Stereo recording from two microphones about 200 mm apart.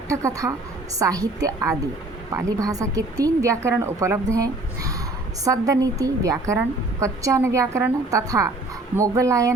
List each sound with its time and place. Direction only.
0.1 s a woman's voice: 15° right (ahead or behind)